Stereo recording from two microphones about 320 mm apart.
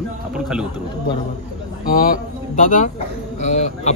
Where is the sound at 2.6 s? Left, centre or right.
Left.